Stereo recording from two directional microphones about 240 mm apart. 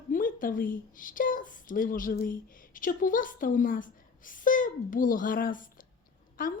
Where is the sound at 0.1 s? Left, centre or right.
Left.